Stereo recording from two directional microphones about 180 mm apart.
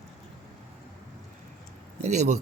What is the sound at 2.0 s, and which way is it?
Speech, 40° right (ahead or behind).